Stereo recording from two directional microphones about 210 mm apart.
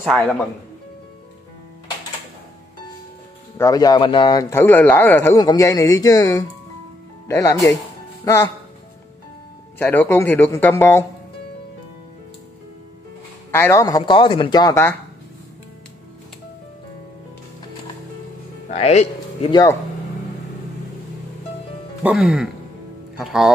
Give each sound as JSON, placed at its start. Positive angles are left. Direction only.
{"t": 0.0, "sound": "speech", "side_deg": 0}
{"t": 3.5, "sound": "a man's voice", "side_deg": 15}
{"t": 9.8, "sound": "a man's voice", "side_deg": 10}
{"t": 13.5, "sound": "a man's voice", "side_deg": 10}
{"t": 18.7, "sound": "speech", "side_deg": 30}
{"t": 19.5, "sound": "a man's voice", "side_deg": 15}
{"t": 22.0, "sound": "speech", "side_deg": -5}